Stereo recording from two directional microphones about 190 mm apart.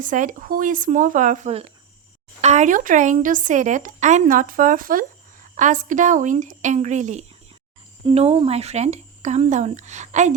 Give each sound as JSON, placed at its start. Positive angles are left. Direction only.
{"t": 0.0, "sound": "speech", "side_deg": -45}